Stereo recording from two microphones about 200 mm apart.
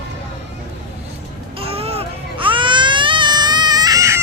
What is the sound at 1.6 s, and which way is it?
Baby cry, 30° right (ahead or behind).